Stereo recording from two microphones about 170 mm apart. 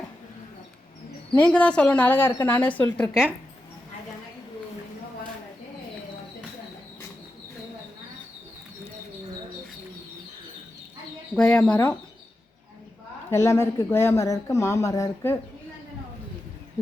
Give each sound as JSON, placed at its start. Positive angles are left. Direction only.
{"t": 1.4, "sound": "speech", "side_deg": 10}
{"t": 11.3, "sound": "speech", "side_deg": 5}
{"t": 13.3, "sound": "speech", "side_deg": 15}